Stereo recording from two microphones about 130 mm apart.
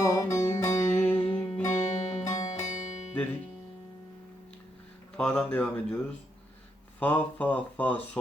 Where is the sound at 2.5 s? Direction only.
65° left (ahead or behind).